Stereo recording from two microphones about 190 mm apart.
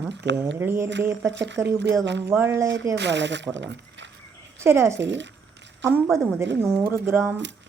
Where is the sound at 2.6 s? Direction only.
75° right (ahead or behind).